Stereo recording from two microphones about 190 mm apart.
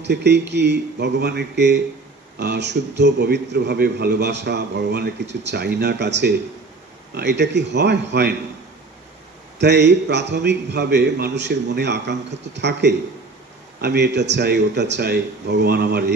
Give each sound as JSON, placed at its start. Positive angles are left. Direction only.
{"t": 0.0, "sound": "a man's voice", "side_deg": -65}
{"t": 9.6, "sound": "a man's voice", "side_deg": -65}